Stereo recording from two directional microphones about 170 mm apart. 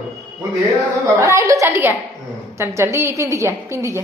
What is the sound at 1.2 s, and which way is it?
A woman's voice, 15° right (ahead or behind).